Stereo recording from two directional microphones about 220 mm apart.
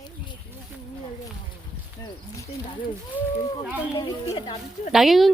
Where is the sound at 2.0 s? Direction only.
15° left (ahead or behind).